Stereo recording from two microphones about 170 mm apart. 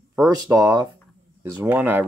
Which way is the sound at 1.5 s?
10° right (ahead or behind).